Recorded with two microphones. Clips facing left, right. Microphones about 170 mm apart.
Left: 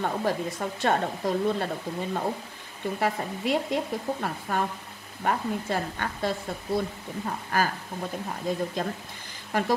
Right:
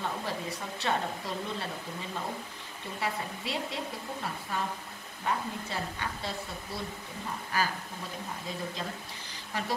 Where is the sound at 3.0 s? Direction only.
50° left (ahead or behind).